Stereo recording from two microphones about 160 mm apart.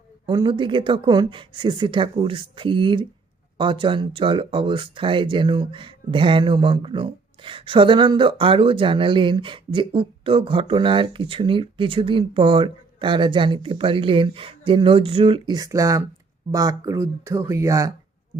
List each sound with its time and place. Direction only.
0.3 s speech: 30° right (ahead or behind)